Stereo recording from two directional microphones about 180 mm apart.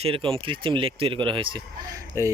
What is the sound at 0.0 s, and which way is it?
Speech, 30° right (ahead or behind).